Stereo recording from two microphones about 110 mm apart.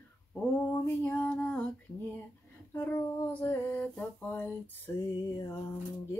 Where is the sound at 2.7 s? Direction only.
20° left (ahead or behind).